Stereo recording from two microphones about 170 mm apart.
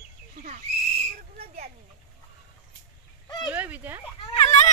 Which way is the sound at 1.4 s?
35° right (ahead or behind).